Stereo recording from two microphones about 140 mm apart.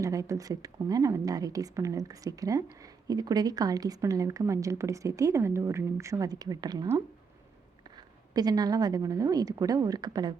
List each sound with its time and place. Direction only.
0.0 s a woman's voice: 25° right (ahead or behind)
7.9 s a woman's voice: 30° right (ahead or behind)